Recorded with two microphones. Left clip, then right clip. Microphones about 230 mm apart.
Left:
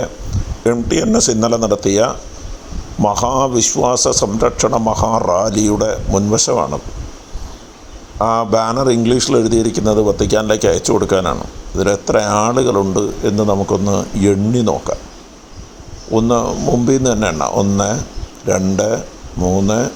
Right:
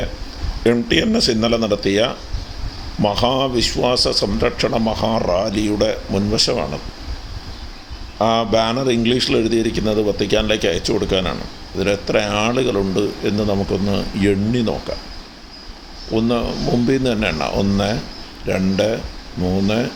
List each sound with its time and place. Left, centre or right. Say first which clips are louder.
0.6 s a man's voice: left 1 dB; centre
8.2 s a man's voice: left 2 dB; centre
16.1 s a man's voice: left 5 dB; centre